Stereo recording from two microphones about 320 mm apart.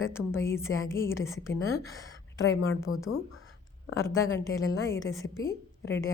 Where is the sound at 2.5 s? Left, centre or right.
Left.